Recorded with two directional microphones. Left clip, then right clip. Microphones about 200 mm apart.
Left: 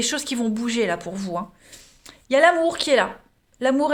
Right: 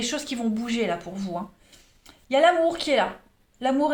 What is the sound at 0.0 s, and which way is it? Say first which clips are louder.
Speech: left 4 dB; 50° left (ahead or behind).